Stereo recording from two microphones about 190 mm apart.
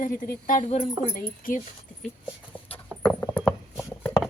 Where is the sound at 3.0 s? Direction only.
10° left (ahead or behind).